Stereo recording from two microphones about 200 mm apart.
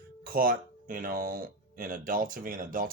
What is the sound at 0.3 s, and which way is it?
Speech, 45° right (ahead or behind).